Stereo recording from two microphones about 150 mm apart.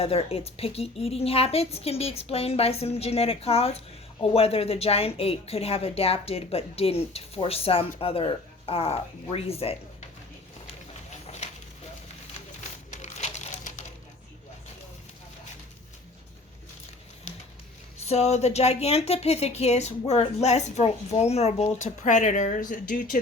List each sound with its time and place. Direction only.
0.0 s a woman's voice: 40° left (ahead or behind)
12.9 s a sound: 55° left (ahead or behind)
18.0 s speech: 45° left (ahead or behind); by 23.0 s 60° left (ahead or behind)